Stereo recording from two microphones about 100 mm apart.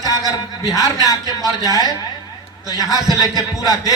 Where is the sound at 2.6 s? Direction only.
40° left (ahead or behind).